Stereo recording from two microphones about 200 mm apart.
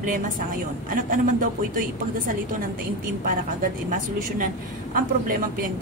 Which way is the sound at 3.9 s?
40° right (ahead or behind).